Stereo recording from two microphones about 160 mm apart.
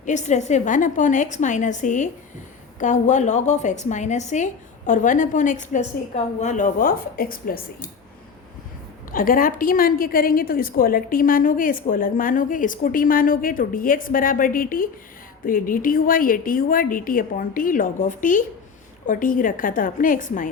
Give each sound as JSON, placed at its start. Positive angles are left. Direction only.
{"t": 0.0, "sound": "a woman's voice", "side_deg": 50}
{"t": 9.1, "sound": "a woman's voice", "side_deg": 60}